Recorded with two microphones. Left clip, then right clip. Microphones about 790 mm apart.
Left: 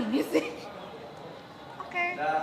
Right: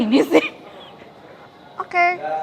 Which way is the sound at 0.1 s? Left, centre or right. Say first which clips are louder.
Right 13 dB; right.